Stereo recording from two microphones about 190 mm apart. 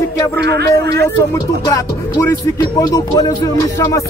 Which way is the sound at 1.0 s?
15° left (ahead or behind).